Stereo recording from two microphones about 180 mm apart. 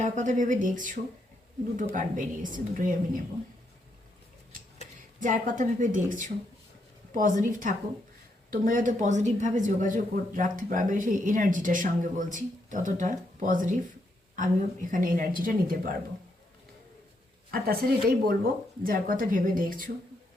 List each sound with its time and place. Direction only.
0.0 s speech: 45° right (ahead or behind)
4.8 s speech: 45° right (ahead or behind)
17.5 s speech: 55° right (ahead or behind)